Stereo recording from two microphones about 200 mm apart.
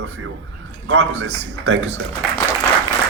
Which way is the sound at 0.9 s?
70° right (ahead or behind).